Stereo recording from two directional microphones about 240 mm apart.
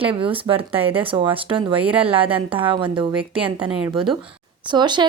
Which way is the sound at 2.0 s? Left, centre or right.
Right.